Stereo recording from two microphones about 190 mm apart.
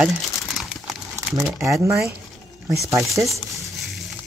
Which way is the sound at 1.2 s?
Centre (ahead or behind).